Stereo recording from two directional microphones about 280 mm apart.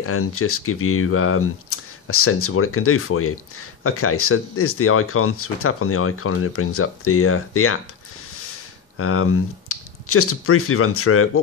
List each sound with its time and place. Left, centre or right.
0.0 s speech: left